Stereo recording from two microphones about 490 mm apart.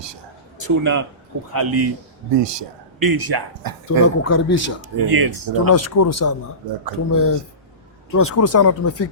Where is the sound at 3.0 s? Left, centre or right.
Right.